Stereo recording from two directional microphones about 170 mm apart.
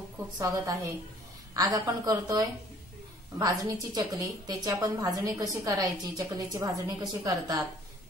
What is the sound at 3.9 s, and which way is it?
A woman's voice, 20° right (ahead or behind).